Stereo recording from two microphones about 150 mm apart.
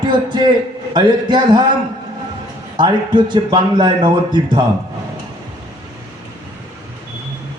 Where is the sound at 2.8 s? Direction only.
30° right (ahead or behind).